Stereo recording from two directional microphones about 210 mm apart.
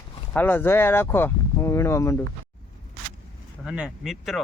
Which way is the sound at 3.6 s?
5° right (ahead or behind).